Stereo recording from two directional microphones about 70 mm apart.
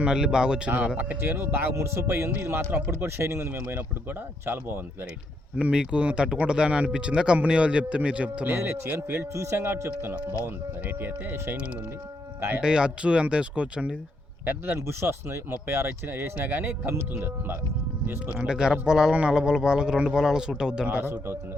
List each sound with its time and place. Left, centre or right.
0.0 s speech: centre
1.2 s speech: right
5.5 s speech: centre
9.0 s speech: right
10.4 s speech: right
12.6 s speech: centre
14.8 s speech: right
16.9 s speech: right
18.3 s speech: centre
21.0 s speech: right